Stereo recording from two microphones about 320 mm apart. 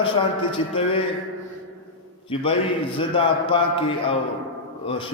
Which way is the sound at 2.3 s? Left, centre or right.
Centre.